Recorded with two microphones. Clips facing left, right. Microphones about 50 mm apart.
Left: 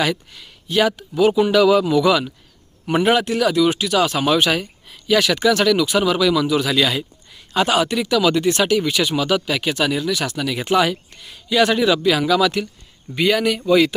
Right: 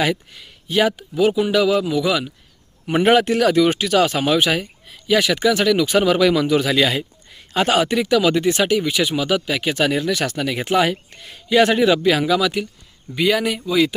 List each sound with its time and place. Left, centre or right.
0.0 s speech: centre
1.3 s speech: centre
3.0 s speech: right
4.3 s speech: centre
5.8 s speech: right
9.7 s speech: right; by 13.6 s centre